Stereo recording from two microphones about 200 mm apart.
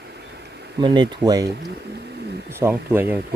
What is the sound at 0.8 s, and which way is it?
Speech, 20° right (ahead or behind).